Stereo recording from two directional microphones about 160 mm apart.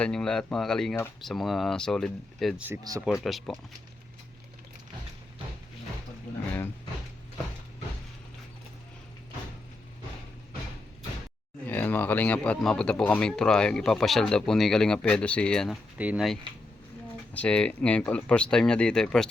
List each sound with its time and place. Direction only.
0.0 s speech: 5° left (ahead or behind)
2.9 s speech: 25° right (ahead or behind)
3.2 s speech: centre (ahead or behind)
11.6 s speech: 10° left (ahead or behind)